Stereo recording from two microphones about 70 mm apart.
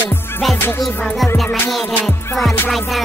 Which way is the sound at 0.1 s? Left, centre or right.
Left.